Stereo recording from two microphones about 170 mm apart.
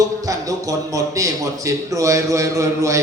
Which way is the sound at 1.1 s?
20° right (ahead or behind).